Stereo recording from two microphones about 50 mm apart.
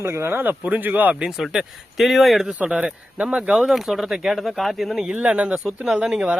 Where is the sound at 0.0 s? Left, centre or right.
Right.